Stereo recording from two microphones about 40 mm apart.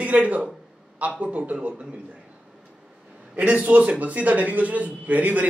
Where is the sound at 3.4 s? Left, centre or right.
Right.